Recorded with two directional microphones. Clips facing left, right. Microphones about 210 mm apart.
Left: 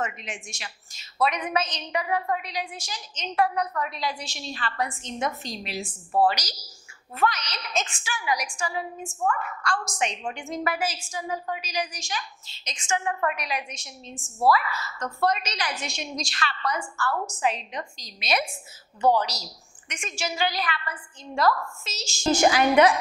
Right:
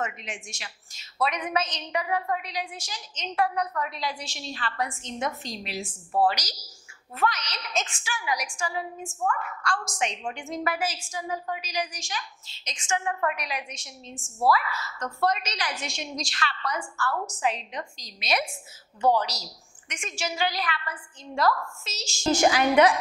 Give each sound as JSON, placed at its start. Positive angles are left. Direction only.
{"t": 0.0, "sound": "a woman's voice", "side_deg": 15}
{"t": 11.3, "sound": "a woman's voice", "side_deg": 20}
{"t": 11.6, "sound": "a woman's voice", "side_deg": 10}
{"t": 15.0, "sound": "a woman's voice", "side_deg": 30}
{"t": 15.2, "sound": "a woman's voice", "side_deg": 10}
{"t": 17.1, "sound": "a woman's voice", "side_deg": 30}
{"t": 17.4, "sound": "a woman's voice", "side_deg": 15}